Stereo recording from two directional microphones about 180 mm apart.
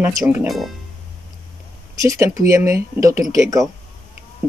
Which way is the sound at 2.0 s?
15° right (ahead or behind).